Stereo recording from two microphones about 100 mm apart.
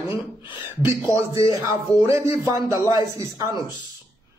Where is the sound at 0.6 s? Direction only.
20° right (ahead or behind).